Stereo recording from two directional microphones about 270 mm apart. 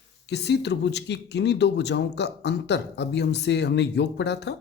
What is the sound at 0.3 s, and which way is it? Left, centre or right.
Speech, left.